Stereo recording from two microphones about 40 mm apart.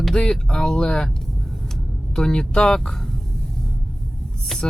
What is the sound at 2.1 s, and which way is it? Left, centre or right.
Speech, centre.